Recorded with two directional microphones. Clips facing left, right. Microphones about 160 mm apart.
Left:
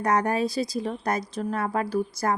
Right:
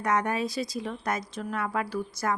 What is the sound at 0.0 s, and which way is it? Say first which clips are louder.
Speech: left 4 dB; 35° left (ahead or behind).